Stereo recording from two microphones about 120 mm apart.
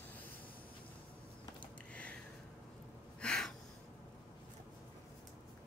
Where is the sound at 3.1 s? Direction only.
5° left (ahead or behind).